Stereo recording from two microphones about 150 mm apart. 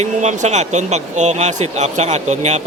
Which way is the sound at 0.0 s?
50° right (ahead or behind).